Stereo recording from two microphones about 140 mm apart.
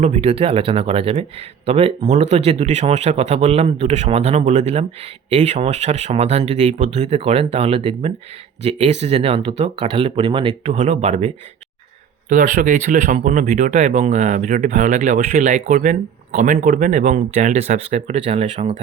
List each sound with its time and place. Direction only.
0.0 s speech: 45° right (ahead or behind)
10.8 s speech: 55° right (ahead or behind)
12.3 s speech: 65° right (ahead or behind)
15.7 s speech: 75° right (ahead or behind)
17.3 s speech: 50° right (ahead or behind)